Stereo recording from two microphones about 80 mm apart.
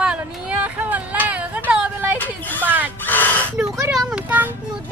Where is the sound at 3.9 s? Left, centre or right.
Centre.